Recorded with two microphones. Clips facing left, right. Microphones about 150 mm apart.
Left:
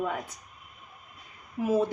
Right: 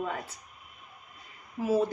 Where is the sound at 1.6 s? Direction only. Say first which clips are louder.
Left 1 dB; 20° left (ahead or behind).